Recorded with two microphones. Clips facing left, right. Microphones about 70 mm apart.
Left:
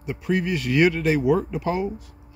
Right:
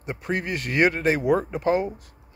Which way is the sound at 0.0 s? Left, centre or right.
Right.